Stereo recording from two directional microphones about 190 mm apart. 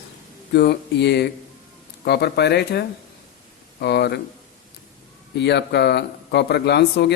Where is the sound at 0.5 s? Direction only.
60° left (ahead or behind).